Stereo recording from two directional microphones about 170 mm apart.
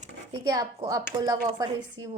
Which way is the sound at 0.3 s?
20° right (ahead or behind).